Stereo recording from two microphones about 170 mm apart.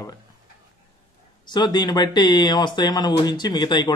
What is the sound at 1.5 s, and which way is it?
Speech, 25° left (ahead or behind).